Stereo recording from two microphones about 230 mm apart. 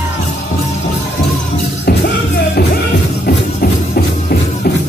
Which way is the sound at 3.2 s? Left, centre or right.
Left.